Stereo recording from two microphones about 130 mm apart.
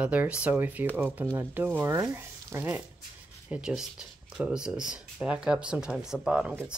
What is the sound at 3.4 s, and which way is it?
Speech, 5° right (ahead or behind).